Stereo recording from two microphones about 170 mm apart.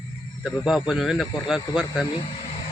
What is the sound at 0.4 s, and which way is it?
Speech, centre (ahead or behind).